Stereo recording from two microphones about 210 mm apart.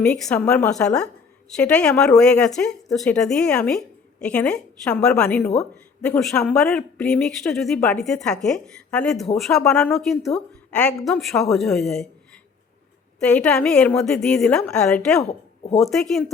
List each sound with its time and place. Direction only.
0.0 s speech: 5° left (ahead or behind)
13.1 s speech: 5° left (ahead or behind)
15.2 s speech: 30° left (ahead or behind)
15.8 s speech: centre (ahead or behind)